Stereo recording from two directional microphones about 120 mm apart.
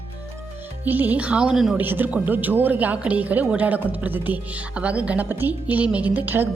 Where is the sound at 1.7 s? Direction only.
15° right (ahead or behind).